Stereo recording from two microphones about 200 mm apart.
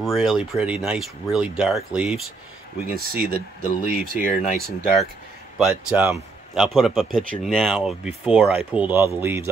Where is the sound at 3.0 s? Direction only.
45° right (ahead or behind).